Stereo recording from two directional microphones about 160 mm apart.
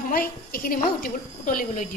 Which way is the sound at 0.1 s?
65° left (ahead or behind).